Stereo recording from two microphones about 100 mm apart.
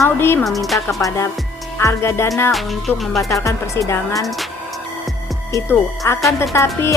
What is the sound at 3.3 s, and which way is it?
Speech, 30° left (ahead or behind).